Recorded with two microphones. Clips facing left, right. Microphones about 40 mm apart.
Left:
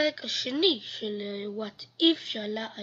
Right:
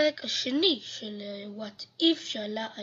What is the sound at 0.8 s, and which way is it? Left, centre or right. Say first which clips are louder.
A woman's voice: left 5 dB; centre.